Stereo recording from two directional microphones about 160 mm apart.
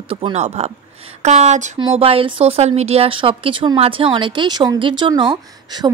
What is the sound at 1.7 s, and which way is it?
Speech, 35° right (ahead or behind).